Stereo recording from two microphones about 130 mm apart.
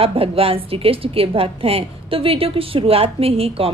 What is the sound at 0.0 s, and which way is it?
A woman's voice, 45° right (ahead or behind).